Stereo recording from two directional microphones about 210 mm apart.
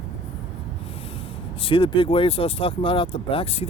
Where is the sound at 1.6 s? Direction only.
25° left (ahead or behind).